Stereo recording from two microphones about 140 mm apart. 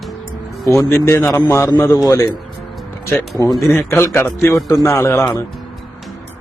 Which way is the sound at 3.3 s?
30° left (ahead or behind).